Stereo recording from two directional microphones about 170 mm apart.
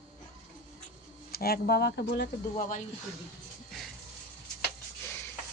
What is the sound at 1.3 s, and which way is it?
Speech, 65° left (ahead or behind).